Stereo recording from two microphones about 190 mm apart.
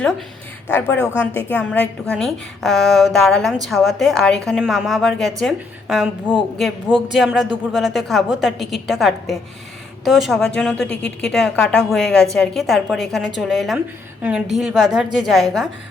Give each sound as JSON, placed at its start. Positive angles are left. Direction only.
{"t": 0.7, "sound": "a woman's voice", "side_deg": 10}